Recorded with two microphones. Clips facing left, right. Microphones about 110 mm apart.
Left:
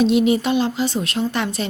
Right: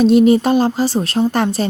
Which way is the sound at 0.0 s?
40° right (ahead or behind).